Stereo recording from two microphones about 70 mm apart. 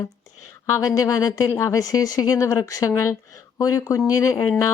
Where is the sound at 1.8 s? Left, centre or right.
Left.